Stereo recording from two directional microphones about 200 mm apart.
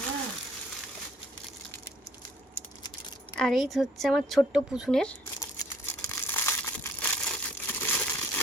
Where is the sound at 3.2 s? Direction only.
5° left (ahead or behind).